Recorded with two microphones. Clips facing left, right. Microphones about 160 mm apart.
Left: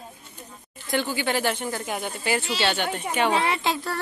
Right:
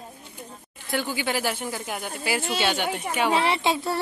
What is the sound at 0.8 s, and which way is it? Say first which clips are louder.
Speech: left 2 dB; 10° right (ahead or behind).